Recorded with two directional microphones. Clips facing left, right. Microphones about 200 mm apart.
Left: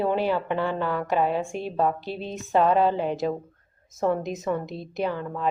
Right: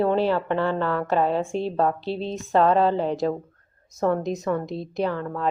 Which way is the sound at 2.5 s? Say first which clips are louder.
Right 1 dB; 5° left (ahead or behind).